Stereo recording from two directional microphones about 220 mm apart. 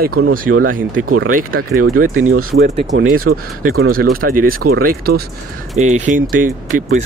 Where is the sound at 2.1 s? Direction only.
70° right (ahead or behind).